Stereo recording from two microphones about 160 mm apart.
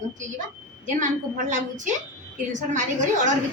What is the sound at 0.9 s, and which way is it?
A woman's voice, 50° right (ahead or behind).